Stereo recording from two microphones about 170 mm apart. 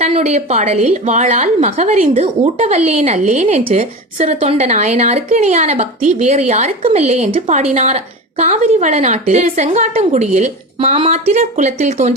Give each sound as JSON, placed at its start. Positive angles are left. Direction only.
{"t": 0.0, "sound": "speech", "side_deg": -40}